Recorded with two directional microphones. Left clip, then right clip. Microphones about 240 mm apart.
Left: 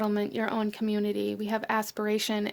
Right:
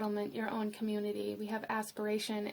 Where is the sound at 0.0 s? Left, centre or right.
Left.